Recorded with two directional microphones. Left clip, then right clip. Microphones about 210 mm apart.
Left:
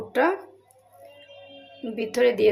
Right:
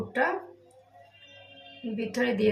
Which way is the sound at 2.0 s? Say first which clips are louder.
Left 7 dB; 50° left (ahead or behind).